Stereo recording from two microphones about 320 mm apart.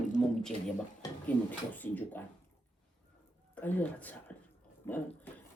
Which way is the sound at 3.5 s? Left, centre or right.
Centre.